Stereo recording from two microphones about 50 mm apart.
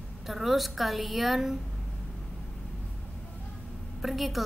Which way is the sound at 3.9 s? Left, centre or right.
Centre.